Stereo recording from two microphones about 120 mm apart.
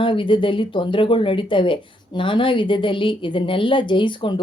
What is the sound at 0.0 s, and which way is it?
Speech, 45° left (ahead or behind).